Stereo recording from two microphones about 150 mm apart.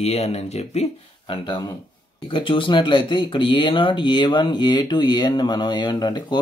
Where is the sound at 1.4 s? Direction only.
30° left (ahead or behind).